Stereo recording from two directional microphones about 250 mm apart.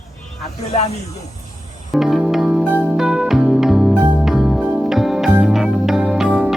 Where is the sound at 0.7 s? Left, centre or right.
Left.